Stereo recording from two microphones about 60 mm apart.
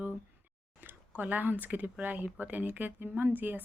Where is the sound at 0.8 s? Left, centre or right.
Right.